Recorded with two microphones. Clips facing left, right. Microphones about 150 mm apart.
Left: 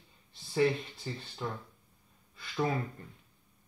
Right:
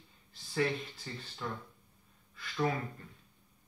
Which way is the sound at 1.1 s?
20° left (ahead or behind).